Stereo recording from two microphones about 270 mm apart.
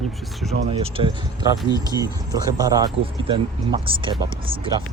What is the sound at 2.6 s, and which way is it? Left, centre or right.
Speech, centre.